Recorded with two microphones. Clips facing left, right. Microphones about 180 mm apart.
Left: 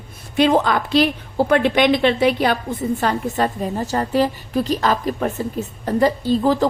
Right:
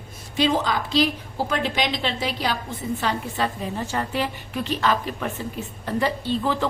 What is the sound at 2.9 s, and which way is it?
A woman's voice, 45° left (ahead or behind).